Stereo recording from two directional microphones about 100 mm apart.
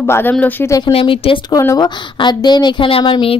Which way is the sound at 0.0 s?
20° left (ahead or behind).